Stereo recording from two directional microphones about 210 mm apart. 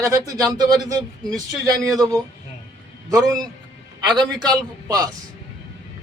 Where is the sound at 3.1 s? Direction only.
15° right (ahead or behind).